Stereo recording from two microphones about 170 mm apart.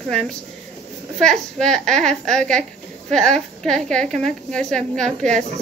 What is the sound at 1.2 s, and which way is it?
A woman's voice, 5° left (ahead or behind).